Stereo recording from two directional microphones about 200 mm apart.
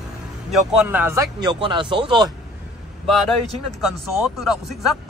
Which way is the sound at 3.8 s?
Centre (ahead or behind).